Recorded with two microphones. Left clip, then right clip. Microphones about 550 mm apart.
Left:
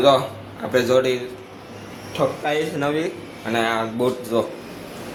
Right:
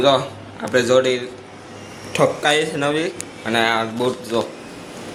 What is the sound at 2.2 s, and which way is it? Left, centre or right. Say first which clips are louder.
Speech: right 5 dB; left.